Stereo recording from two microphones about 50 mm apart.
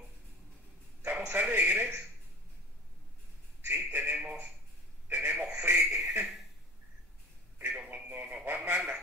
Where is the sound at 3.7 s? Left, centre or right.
Right.